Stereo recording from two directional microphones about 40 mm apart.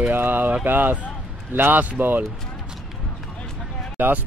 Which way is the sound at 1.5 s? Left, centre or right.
Right.